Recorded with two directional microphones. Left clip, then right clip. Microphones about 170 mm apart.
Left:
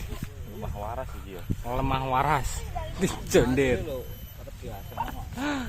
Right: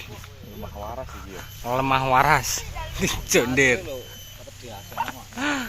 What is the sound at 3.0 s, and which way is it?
Speech, 20° left (ahead or behind).